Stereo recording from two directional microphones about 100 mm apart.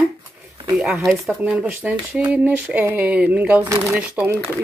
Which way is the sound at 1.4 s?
15° right (ahead or behind).